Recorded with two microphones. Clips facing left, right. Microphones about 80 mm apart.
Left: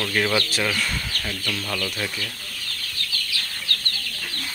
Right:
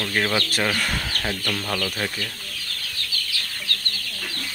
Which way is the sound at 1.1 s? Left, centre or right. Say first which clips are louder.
Right 3 dB; right.